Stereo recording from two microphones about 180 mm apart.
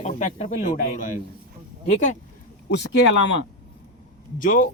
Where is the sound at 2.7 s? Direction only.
80° left.